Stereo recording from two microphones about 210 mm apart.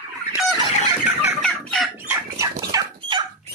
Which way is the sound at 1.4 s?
Centre (ahead or behind).